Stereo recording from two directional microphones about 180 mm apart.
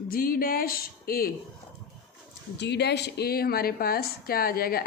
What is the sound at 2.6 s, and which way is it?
Speech, 70° left (ahead or behind).